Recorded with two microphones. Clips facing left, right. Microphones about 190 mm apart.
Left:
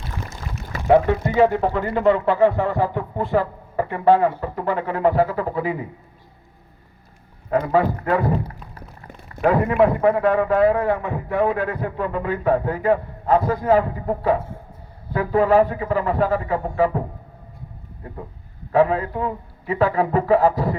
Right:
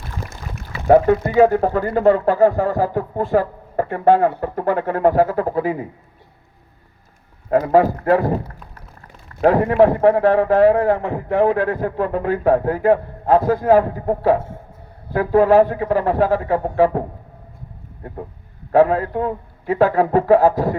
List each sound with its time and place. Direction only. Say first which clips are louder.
0.9 s speech: right 3 dB; 45° right (ahead or behind)
7.5 s speech: right 4 dB; 45° right (ahead or behind)
9.6 s speech: right 3 dB; 40° right (ahead or behind)
10.9 s speech: right 4 dB; 50° right (ahead or behind)
18.7 s speech: right 3 dB; 45° right (ahead or behind)